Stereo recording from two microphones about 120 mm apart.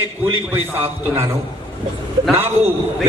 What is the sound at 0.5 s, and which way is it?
Speech, 20° right (ahead or behind).